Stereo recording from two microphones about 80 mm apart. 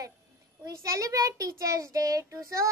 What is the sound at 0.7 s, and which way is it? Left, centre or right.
A child's voice, right.